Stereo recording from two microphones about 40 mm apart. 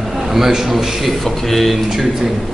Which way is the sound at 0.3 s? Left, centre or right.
Centre.